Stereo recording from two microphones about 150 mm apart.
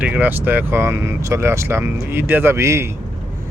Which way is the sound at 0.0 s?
10° right (ahead or behind).